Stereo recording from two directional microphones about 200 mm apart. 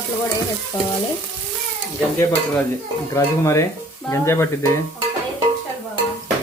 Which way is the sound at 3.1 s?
15° left (ahead or behind).